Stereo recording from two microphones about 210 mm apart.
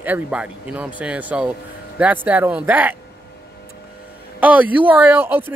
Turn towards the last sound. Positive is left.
turn(degrees=-10)  # may be behind; listen again after turning